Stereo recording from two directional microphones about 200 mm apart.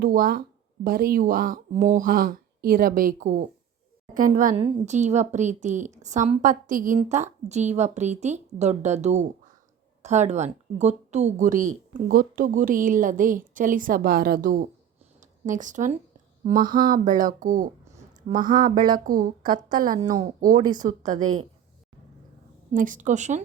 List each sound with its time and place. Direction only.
0.0 s speech: 45° right (ahead or behind)
18.3 s a woman's voice: 25° right (ahead or behind)
18.8 s speech: 45° right (ahead or behind)
20.0 s a woman's voice: 20° right (ahead or behind)
20.8 s speech: 35° right (ahead or behind)
22.7 s speech: 40° right (ahead or behind)